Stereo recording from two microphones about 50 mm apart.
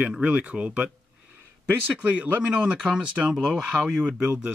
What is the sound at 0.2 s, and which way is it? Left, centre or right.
Speech, right.